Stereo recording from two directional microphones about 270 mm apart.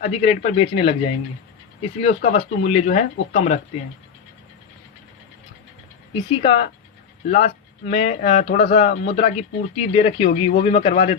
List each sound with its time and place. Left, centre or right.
0.0 s speech: left
6.4 s speech: left